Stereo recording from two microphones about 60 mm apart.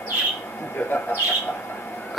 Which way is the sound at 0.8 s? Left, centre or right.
Left.